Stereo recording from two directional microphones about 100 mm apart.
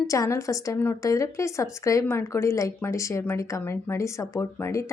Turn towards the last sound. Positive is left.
turn(degrees=25)  # may be behind; listen again after turning